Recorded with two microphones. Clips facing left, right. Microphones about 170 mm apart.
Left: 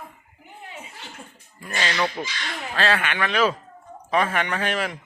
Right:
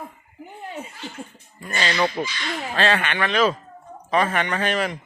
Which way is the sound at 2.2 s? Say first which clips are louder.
Right 4 dB; 10° right (ahead or behind).